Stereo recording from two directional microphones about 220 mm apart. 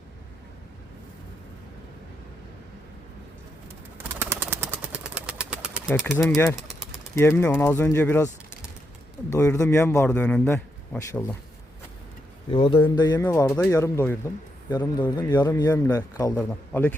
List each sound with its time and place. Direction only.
3.9 s bird: 10° right (ahead or behind)
6.0 s speech: centre (ahead or behind)
6.2 s a man's voice: 10° left (ahead or behind)
9.3 s a man's voice: 15° left (ahead or behind)
12.5 s a man's voice: 25° left (ahead or behind); by 16.9 s 10° left (ahead or behind)